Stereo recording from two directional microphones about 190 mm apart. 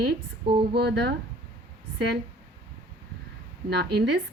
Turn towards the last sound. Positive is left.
turn(degrees=-60)  # may be behind; listen again after turning